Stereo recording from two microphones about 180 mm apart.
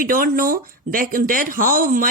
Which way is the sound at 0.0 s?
50° right (ahead or behind).